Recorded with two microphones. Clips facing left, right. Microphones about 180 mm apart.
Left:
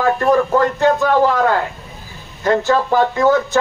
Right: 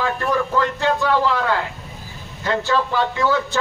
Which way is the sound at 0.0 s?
45° left (ahead or behind).